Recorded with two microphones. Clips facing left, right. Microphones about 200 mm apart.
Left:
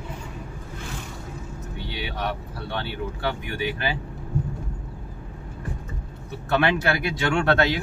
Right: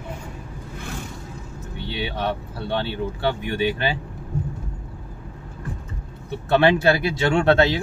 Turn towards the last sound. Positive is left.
turn(degrees=-25)  # may be behind; listen again after turning